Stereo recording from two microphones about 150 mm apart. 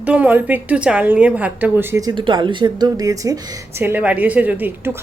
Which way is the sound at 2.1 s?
30° right (ahead or behind).